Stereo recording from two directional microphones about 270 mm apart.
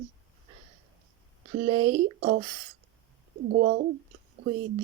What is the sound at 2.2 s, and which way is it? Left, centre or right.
Speech, right.